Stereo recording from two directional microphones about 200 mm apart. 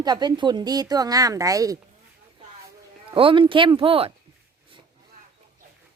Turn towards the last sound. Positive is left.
turn(degrees=-25)  # may be behind; listen again after turning